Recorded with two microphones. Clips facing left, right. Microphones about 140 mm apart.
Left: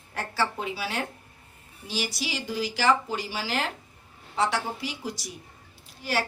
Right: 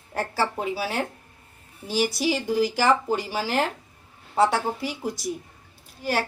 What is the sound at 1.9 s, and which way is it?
A woman's voice, 55° right (ahead or behind).